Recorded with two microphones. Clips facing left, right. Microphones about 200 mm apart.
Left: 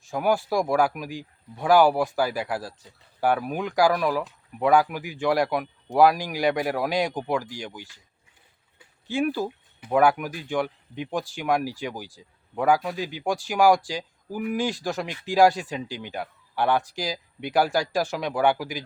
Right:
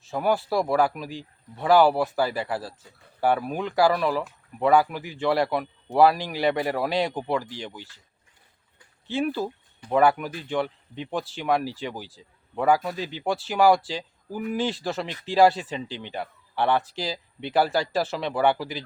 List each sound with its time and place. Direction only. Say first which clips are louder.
0.1 s a man's voice: even; 10° left (ahead or behind)
4.9 s speech: even; 15° left (ahead or behind)
12.1 s a man's voice: even; centre (ahead or behind)